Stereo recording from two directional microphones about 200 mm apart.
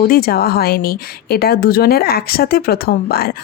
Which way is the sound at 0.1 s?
50° left (ahead or behind).